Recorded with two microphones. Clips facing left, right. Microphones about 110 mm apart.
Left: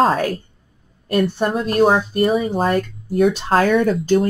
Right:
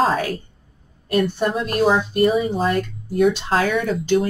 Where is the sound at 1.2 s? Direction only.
45° left (ahead or behind).